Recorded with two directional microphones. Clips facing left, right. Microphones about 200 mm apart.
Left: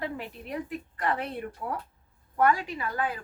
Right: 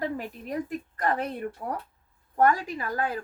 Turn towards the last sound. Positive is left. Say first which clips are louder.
# right 2 dB
turn(degrees=-40)  # may be behind; listen again after turning